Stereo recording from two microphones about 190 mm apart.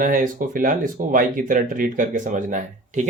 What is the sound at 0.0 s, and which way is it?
Speech, 45° right (ahead or behind).